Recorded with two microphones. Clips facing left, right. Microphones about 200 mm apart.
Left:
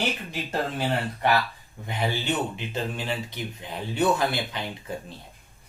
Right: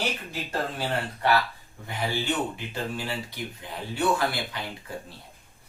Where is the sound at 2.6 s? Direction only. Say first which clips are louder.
Left 2 dB; 20° left (ahead or behind).